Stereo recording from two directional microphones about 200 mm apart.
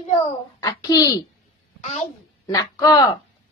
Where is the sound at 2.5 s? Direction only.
15° left (ahead or behind).